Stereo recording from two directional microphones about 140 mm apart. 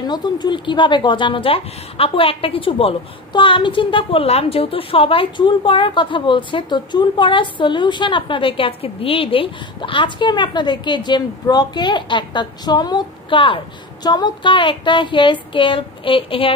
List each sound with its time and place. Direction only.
0.0 s a woman's voice: 30° left (ahead or behind)